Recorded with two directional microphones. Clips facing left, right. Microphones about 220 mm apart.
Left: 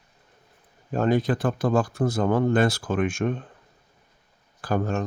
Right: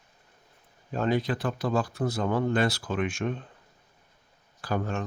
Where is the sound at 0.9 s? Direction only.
50° left (ahead or behind).